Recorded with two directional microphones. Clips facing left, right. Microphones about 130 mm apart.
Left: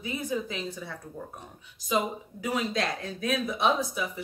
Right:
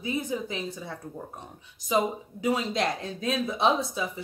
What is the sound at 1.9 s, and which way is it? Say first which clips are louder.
Speech: right 2 dB; 20° right (ahead or behind).